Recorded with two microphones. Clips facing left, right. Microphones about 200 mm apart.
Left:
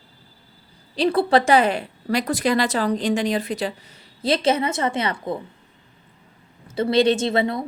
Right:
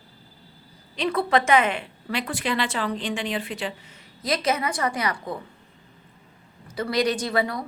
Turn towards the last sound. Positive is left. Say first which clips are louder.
# left 4 dB
turn(degrees=25)  # may be behind; listen again after turning